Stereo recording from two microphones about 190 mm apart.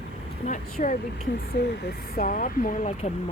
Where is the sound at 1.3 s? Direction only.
65° left (ahead or behind).